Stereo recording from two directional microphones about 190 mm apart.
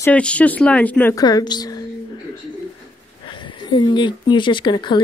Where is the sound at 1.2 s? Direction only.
20° left (ahead or behind).